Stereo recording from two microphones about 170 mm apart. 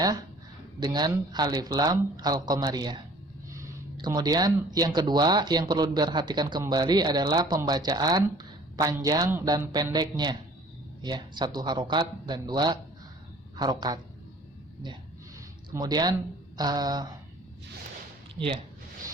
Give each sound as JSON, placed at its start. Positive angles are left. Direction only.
{"t": 0.0, "sound": "speech", "side_deg": -25}
{"t": 15.7, "sound": "speech", "side_deg": -25}
{"t": 18.3, "sound": "speech", "side_deg": -30}